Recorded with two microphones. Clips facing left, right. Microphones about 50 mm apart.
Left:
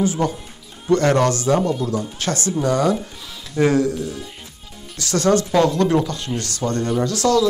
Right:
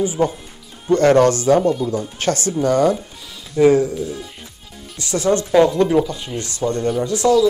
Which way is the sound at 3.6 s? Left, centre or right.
Centre.